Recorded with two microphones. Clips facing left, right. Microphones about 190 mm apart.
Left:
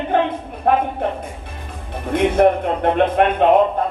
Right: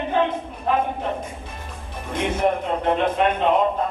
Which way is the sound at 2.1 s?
60° left (ahead or behind).